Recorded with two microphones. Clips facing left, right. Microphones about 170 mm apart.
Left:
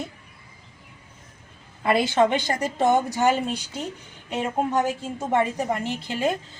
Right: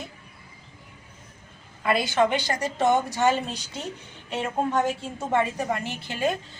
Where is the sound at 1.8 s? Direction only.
25° left (ahead or behind).